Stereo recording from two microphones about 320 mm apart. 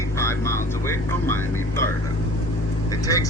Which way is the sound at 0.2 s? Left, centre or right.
Centre.